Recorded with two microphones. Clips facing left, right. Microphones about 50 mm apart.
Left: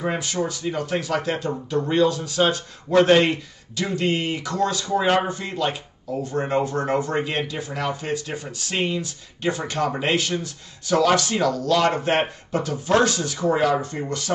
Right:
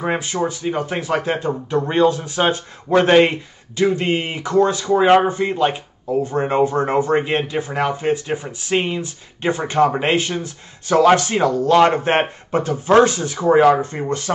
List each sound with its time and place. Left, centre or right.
0.0 s speech: right